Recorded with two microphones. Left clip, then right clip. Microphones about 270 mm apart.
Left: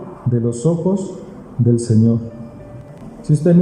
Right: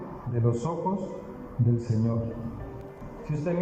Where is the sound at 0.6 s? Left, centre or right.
Left.